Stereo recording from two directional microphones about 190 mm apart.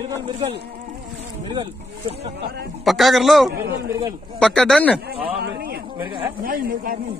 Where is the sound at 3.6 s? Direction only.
60° right (ahead or behind).